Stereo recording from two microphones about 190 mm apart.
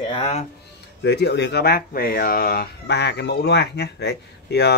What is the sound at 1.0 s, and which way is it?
Speech, 65° left (ahead or behind).